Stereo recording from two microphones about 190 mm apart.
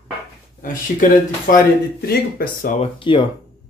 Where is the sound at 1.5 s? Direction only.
55° left (ahead or behind).